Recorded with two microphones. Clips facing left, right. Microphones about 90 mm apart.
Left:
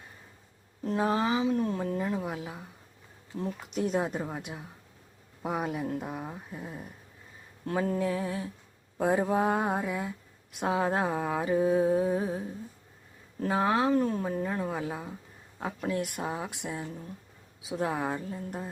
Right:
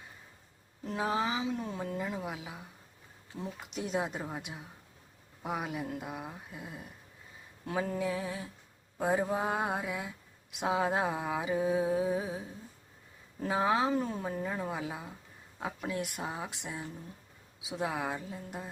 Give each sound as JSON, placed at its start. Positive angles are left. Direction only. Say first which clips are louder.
{"t": 0.9, "sound": "speech", "louder": "left 6 dB", "side_deg": 40}
{"t": 1.1, "sound": "speech", "louder": "left 4 dB", "side_deg": 0}
{"t": 7.9, "sound": "speech", "louder": "left 4 dB", "side_deg": -5}